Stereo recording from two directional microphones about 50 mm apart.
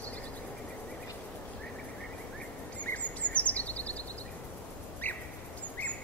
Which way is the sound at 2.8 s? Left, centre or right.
Left.